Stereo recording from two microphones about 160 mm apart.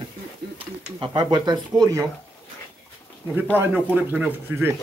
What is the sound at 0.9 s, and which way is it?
Speech, 30° right (ahead or behind).